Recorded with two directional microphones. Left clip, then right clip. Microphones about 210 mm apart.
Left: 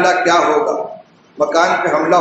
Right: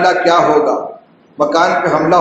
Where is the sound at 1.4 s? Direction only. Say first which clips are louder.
Right 2 dB; 30° right (ahead or behind).